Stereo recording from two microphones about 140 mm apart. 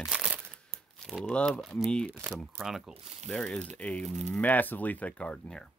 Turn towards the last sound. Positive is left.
turn(degrees=5)  # may be behind; listen again after turning